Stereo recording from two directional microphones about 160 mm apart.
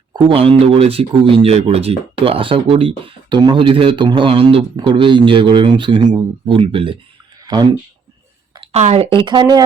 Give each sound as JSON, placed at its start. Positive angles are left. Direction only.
{"t": 0.1, "sound": "speech", "side_deg": -35}
{"t": 8.5, "sound": "speech", "side_deg": -40}